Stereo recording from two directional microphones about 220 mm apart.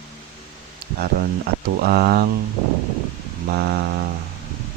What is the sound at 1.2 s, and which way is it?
Speech, 45° right (ahead or behind).